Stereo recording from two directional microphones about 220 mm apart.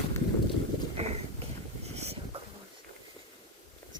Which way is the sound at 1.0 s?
30° right (ahead or behind).